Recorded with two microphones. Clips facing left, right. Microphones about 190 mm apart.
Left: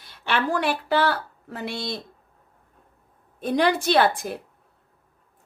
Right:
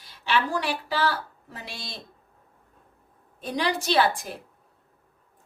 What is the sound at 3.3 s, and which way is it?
Speech, 55° left (ahead or behind).